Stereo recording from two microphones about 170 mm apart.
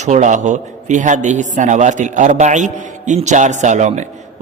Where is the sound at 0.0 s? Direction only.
45° right (ahead or behind).